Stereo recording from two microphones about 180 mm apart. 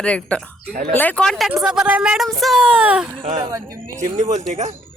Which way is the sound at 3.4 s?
20° right (ahead or behind).